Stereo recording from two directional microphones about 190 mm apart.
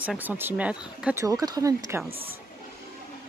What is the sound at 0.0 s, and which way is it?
Speech, 5° right (ahead or behind).